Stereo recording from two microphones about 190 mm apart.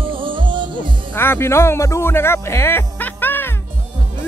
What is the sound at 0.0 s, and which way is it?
Music, 25° right (ahead or behind).